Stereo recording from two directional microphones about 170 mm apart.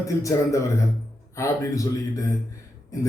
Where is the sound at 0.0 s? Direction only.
20° left (ahead or behind).